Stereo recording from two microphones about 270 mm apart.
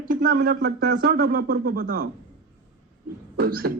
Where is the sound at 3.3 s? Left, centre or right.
Right.